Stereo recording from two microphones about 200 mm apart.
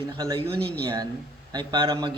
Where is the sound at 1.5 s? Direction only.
20° right (ahead or behind).